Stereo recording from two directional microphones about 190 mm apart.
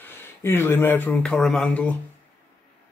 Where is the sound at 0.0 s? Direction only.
10° left (ahead or behind).